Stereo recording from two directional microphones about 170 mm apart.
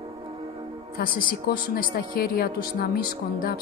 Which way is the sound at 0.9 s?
60° left (ahead or behind).